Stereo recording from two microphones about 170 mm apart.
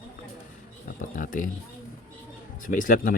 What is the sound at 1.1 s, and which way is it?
Speech, 50° left (ahead or behind).